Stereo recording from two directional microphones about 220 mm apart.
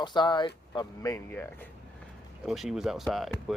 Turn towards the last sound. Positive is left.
turn(degrees=0)  # may be behind; listen again after turning